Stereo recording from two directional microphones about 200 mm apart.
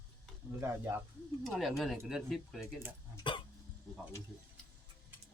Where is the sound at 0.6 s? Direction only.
15° right (ahead or behind).